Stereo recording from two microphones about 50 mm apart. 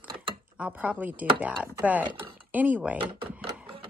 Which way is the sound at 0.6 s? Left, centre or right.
Right.